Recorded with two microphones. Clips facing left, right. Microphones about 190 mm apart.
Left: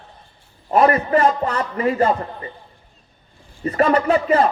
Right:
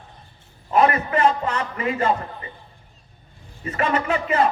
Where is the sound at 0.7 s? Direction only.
35° left (ahead or behind).